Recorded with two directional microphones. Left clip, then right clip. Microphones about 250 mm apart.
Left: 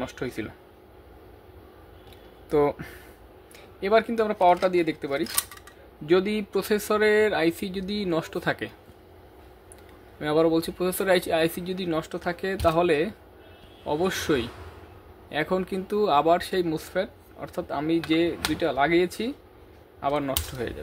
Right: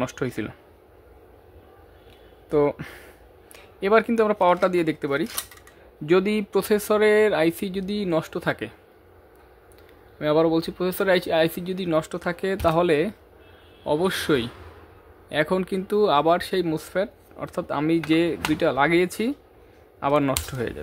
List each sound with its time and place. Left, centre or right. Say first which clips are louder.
0.0 s speech: right 4 dB; right
2.5 s speech: right 1 dB; centre
10.1 s speech: right 2 dB; centre